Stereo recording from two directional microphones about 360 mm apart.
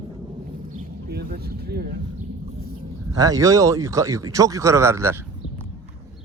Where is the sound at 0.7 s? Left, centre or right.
Right.